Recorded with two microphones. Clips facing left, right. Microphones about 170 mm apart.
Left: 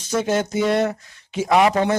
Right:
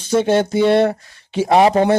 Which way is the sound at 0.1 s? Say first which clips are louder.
Right 6 dB; 30° right (ahead or behind).